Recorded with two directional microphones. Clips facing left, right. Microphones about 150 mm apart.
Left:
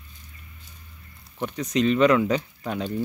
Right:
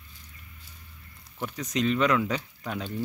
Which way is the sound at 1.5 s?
Centre (ahead or behind).